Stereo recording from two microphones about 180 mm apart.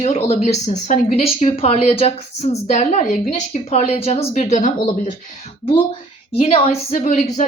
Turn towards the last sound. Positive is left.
turn(degrees=40)  # may be behind; listen again after turning